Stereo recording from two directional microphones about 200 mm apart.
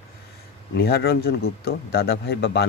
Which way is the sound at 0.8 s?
50° left (ahead or behind).